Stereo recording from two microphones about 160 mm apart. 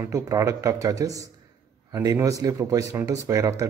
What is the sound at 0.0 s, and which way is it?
Speech, 20° right (ahead or behind).